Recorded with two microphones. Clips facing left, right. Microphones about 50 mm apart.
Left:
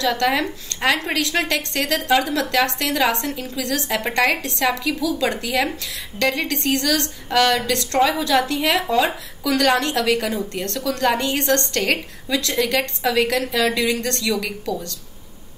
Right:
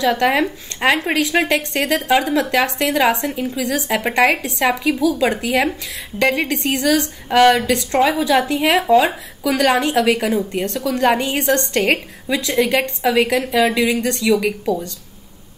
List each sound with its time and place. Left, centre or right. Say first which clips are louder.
0.0 s a woman's voice: right 4 dB; centre